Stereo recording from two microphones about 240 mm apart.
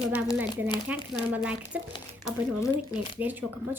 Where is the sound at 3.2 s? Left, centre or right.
Centre.